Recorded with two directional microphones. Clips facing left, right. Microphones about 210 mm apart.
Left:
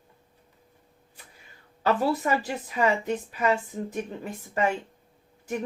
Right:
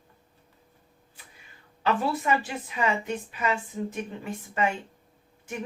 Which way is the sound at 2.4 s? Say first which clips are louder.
Left 3 dB; 40° left (ahead or behind).